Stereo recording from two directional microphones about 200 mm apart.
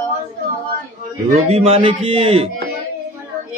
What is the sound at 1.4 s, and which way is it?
Speech, 30° right (ahead or behind).